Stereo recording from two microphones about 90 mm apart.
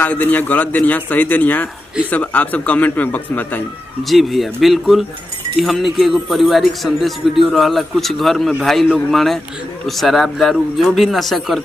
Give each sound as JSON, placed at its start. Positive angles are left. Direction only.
{"t": 0.0, "sound": "a man's voice", "side_deg": 20}
{"t": 4.1, "sound": "speech", "side_deg": 0}